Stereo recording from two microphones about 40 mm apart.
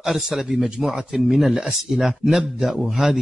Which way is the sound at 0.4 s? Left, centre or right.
Centre.